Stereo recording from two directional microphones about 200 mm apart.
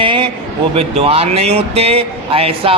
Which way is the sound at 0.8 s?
30° right (ahead or behind).